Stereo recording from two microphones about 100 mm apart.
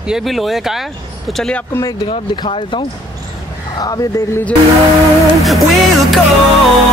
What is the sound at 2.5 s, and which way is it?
Speech, 60° left (ahead or behind).